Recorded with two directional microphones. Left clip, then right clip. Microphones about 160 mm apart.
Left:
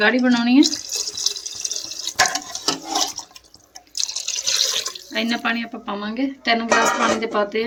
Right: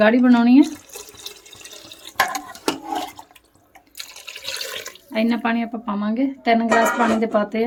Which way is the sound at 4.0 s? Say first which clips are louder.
Left 9 dB; 10° right (ahead or behind).